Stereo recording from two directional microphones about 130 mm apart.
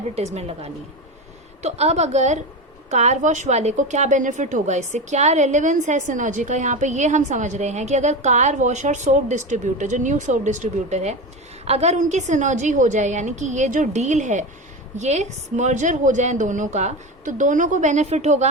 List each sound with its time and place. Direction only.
0.3 s a woman's voice: 55° right (ahead or behind)